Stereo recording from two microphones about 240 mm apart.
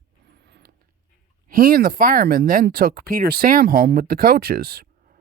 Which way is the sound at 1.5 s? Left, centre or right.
Right.